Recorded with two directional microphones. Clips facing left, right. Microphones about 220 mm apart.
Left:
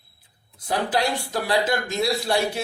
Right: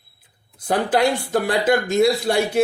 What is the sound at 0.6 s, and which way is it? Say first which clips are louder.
A man's voice: right 5 dB; 50° right (ahead or behind).